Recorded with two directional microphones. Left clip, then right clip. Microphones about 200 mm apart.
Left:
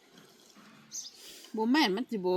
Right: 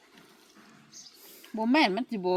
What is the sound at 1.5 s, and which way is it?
Speech, 25° right (ahead or behind).